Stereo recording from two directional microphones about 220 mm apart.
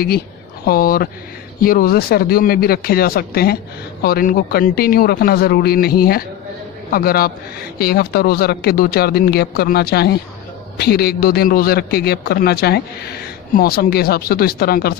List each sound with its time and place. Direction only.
0.7 s speech: 40° left (ahead or behind)